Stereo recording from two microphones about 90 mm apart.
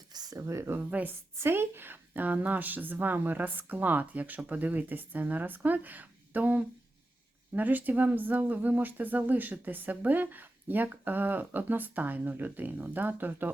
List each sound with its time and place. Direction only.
0.1 s speech: 45° right (ahead or behind)
0.8 s speech: 20° right (ahead or behind)